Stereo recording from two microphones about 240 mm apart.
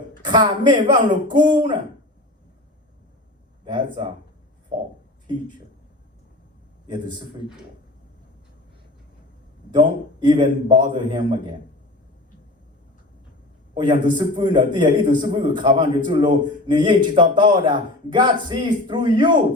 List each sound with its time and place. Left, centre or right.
0.2 s a man's voice: centre
3.7 s a man's voice: centre
6.8 s a man's voice: centre
9.7 s a man's voice: centre
13.7 s a man's voice: centre